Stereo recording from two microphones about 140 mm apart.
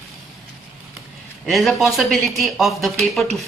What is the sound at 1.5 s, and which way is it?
Speech, centre (ahead or behind).